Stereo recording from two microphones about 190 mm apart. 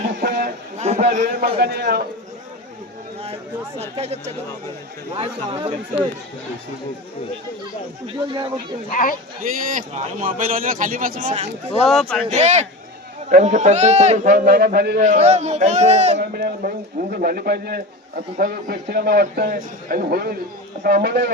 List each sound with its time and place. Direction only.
0.3 s a sound: 60° right (ahead or behind)
0.8 s a man's voice: 35° right (ahead or behind); by 2.0 s 60° right (ahead or behind)
3.8 s a man's voice: 35° right (ahead or behind)
8.9 s speech: 45° left (ahead or behind)
9.4 s speech: 45° right (ahead or behind)
11.9 s speech: centre (ahead or behind)
12.2 s a man's voice: 35° right (ahead or behind)
16.1 s a man's voice: 60° right (ahead or behind)